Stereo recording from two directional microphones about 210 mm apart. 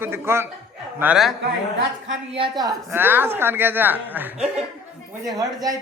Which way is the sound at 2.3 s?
20° right (ahead or behind).